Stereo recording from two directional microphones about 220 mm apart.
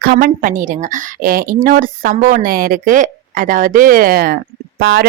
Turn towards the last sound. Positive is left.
turn(degrees=-50)  # may be behind; listen again after turning